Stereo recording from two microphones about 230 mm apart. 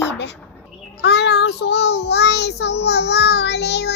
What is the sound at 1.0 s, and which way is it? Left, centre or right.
Child singing, left.